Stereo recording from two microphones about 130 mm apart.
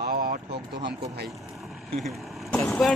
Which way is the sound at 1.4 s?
Centre (ahead or behind).